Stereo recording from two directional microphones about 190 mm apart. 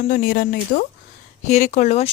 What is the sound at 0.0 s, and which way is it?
Speech, 45° left (ahead or behind).